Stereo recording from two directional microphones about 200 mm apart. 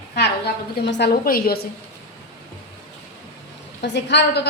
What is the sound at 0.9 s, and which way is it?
Speech, 55° left (ahead or behind).